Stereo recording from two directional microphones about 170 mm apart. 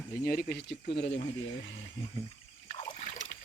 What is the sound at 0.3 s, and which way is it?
Speech, 65° left (ahead or behind).